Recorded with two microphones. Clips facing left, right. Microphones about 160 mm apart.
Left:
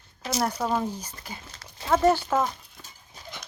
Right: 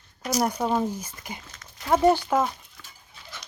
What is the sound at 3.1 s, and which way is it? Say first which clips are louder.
Dog: left 5 dB; 40° left (ahead or behind).